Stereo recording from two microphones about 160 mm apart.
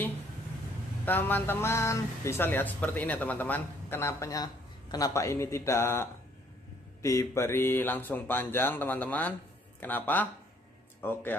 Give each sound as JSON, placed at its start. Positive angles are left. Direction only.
{"t": 1.0, "sound": "speech", "side_deg": 10}